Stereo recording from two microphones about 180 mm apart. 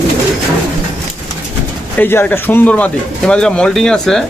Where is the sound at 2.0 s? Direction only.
10° left (ahead or behind).